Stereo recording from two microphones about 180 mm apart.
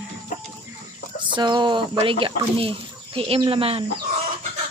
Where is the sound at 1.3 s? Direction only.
25° right (ahead or behind).